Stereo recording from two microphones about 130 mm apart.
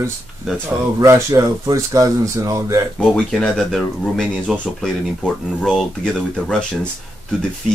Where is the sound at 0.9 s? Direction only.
25° right (ahead or behind).